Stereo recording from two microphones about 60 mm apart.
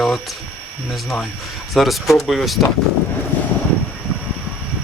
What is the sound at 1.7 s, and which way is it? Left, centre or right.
Speech, centre.